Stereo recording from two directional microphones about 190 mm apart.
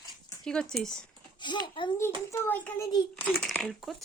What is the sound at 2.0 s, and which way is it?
A child's voice, 15° left (ahead or behind).